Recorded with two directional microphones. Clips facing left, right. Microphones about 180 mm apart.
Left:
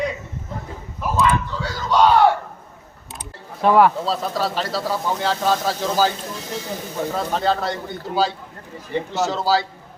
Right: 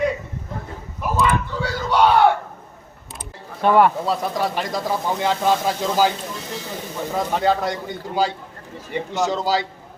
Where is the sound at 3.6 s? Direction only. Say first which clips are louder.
Left 1 dB; centre (ahead or behind).